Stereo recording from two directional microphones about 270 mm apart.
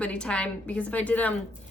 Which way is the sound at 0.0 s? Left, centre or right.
Centre.